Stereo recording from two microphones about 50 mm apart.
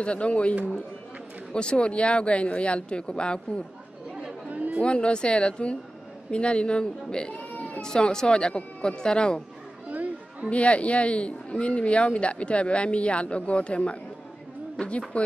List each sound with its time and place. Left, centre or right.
0.0 s speech: left
4.5 s chatter: right
4.8 s speech: left
7.3 s cat: left
7.8 s speech: centre
9.8 s children playing: right
10.5 s speech: left